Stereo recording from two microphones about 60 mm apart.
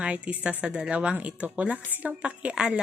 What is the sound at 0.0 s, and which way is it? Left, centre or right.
Speech, centre.